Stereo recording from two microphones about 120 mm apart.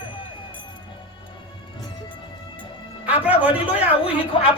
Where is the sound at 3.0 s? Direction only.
10° right (ahead or behind).